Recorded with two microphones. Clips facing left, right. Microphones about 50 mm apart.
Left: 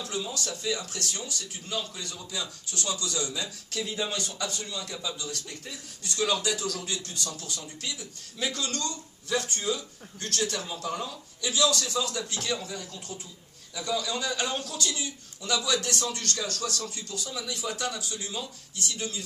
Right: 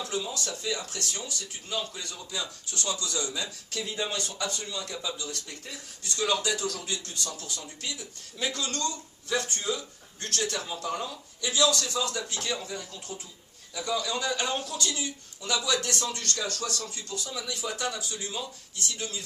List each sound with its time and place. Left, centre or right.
0.1 s a man's voice: centre
3.7 s a man's voice: centre
6.1 s a man's voice: centre
6.3 s a man's voice: centre
16.1 s a man's voice: centre